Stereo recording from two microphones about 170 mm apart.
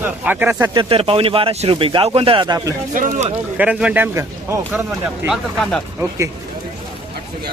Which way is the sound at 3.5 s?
5° right (ahead or behind).